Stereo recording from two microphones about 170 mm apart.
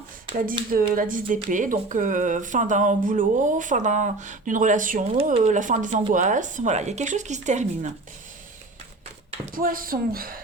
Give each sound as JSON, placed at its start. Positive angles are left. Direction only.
{"t": 0.9, "sound": "speech", "side_deg": -55}
{"t": 5.1, "sound": "speech", "side_deg": -40}
{"t": 9.6, "sound": "speech", "side_deg": -55}